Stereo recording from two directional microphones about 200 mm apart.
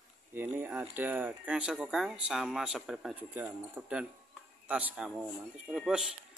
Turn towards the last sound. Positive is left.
turn(degrees=0)  # may be behind; listen again after turning